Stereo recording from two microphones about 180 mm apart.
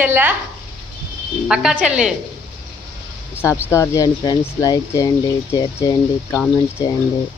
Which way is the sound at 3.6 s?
15° left (ahead or behind).